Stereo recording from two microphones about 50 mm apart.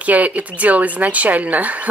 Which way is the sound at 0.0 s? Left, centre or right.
Right.